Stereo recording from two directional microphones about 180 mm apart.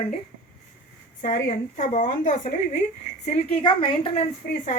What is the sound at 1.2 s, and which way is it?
A woman's voice, 45° left (ahead or behind).